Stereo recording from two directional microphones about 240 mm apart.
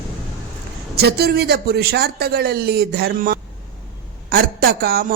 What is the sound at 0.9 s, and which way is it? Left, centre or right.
A woman's voice, right.